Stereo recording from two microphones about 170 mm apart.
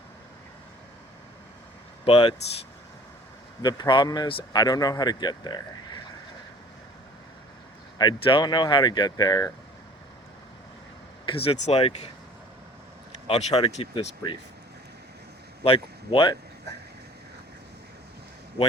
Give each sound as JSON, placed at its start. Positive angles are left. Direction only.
{"t": 2.0, "sound": "speech", "side_deg": 35}
{"t": 3.6, "sound": "speech", "side_deg": 25}
{"t": 7.9, "sound": "speech", "side_deg": 25}
{"t": 11.3, "sound": "speech", "side_deg": 35}
{"t": 13.2, "sound": "speech", "side_deg": 35}
{"t": 15.6, "sound": "speech", "side_deg": 30}